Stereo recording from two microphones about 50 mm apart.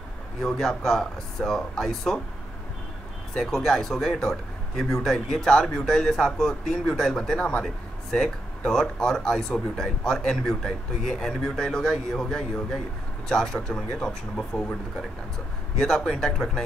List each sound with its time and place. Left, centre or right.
0.4 s speech: centre
3.3 s speech: centre
7.3 s speech: left
7.6 s speech: centre
15.8 s speech: centre